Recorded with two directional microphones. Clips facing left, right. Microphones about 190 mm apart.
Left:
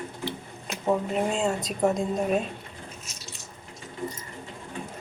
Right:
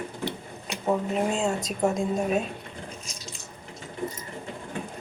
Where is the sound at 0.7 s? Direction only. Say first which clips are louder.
Even; centre (ahead or behind).